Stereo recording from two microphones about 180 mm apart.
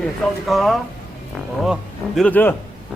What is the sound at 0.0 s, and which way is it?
A man's voice, centre (ahead or behind).